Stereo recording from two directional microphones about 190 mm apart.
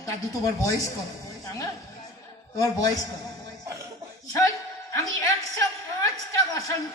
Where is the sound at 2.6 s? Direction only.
20° left (ahead or behind).